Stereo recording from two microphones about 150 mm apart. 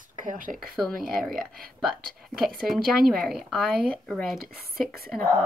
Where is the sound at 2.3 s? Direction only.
5° right (ahead or behind).